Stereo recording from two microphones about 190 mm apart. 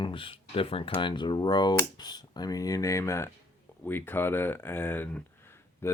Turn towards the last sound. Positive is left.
turn(degrees=10)  # may be behind; listen again after turning